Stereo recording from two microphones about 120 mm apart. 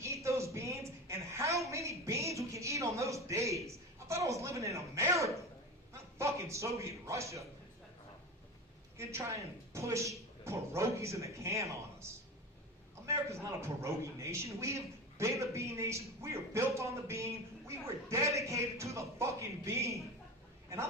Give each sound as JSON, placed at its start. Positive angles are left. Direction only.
{"t": 0.0, "sound": "a sound", "side_deg": -25}
{"t": 5.9, "sound": "a man's voice", "side_deg": -25}
{"t": 9.0, "sound": "a man's voice", "side_deg": -25}